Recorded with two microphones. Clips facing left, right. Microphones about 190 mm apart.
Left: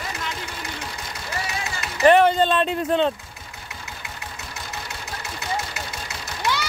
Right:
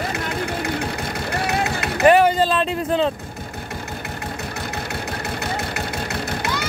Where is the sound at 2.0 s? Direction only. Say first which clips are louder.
Right 1 dB; 10° right (ahead or behind).